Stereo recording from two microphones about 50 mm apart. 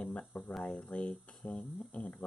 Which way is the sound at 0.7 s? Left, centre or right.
Centre.